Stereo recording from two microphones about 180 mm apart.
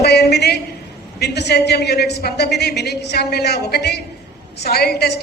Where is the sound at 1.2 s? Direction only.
65° left (ahead or behind).